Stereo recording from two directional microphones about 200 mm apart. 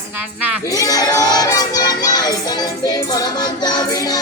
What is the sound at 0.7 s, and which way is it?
Child singing, 15° left (ahead or behind).